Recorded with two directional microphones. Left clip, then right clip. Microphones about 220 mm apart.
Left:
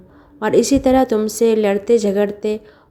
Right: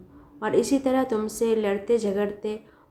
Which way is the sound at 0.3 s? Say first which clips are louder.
Left 8 dB; 30° left (ahead or behind).